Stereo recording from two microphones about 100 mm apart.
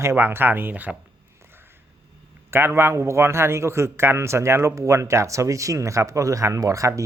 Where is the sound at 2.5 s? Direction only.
25° right (ahead or behind).